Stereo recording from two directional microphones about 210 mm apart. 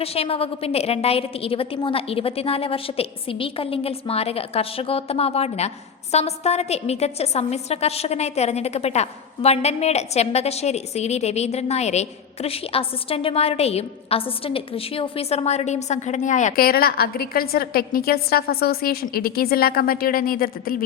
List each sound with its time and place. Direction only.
0.0 s a woman's voice: 30° left (ahead or behind); by 20.7 s 45° left (ahead or behind)